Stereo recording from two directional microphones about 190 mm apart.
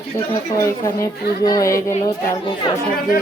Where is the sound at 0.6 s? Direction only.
15° left (ahead or behind).